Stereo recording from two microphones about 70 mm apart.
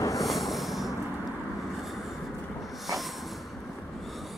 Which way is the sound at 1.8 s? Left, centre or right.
Centre.